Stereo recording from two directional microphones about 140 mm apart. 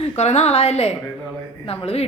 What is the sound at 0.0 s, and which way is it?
A woman's voice, 50° left (ahead or behind).